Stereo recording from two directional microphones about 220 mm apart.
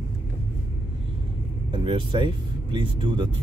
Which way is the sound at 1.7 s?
25° right (ahead or behind).